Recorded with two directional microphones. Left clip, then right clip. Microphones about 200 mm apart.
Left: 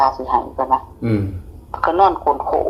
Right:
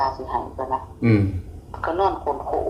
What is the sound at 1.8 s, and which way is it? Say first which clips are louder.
Speech: left 8 dB; 45° left (ahead or behind).